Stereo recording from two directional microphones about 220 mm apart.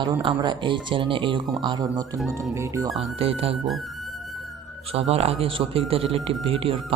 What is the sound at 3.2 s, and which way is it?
Speech, 25° right (ahead or behind).